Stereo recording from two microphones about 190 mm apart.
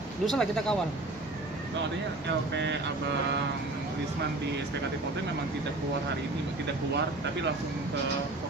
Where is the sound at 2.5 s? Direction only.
65° right (ahead or behind).